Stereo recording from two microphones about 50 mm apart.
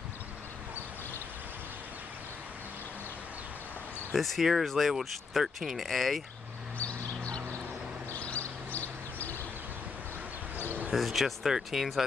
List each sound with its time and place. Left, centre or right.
4.1 s speech: centre
6.8 s a sound: left
10.9 s speech: centre